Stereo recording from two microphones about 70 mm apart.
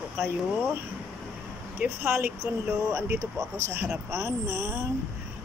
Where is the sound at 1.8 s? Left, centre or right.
Right.